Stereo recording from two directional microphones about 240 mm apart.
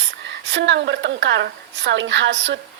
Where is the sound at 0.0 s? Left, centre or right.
Right.